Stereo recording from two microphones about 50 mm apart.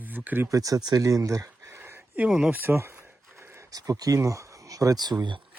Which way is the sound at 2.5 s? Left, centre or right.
Right.